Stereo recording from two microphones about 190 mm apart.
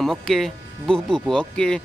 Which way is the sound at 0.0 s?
Centre (ahead or behind).